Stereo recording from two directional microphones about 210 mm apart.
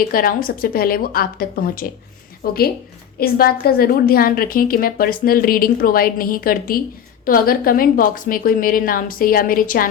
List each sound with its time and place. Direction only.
0.1 s a woman's voice: 45° left (ahead or behind)